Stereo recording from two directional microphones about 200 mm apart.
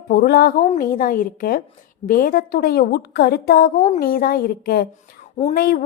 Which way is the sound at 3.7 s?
35° left (ahead or behind).